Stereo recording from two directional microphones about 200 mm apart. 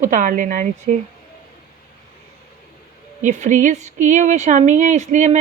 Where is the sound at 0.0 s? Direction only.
40° right (ahead or behind).